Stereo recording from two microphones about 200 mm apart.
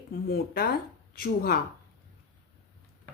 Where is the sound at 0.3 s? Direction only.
50° left (ahead or behind).